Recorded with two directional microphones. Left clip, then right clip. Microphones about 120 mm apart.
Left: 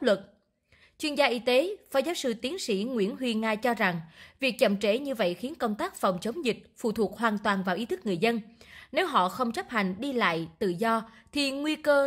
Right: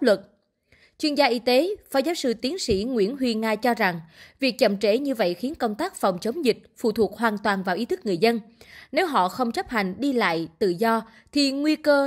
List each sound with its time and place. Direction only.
0.9 s a woman's voice: 30° right (ahead or behind)